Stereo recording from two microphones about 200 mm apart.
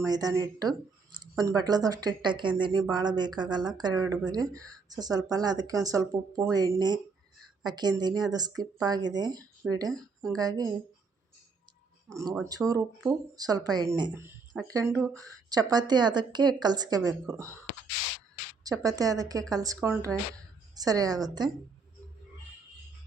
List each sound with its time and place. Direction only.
0.0 s speech: 20° right (ahead or behind)
9.9 s speech: 5° left (ahead or behind)
10.3 s speech: 20° right (ahead or behind)
12.0 s a woman's voice: 15° right (ahead or behind)
18.6 s a woman's voice: 15° right (ahead or behind)